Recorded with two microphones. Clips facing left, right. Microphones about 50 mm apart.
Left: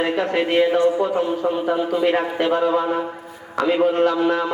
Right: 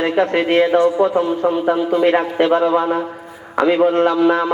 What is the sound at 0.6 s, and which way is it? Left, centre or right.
A man's voice, right.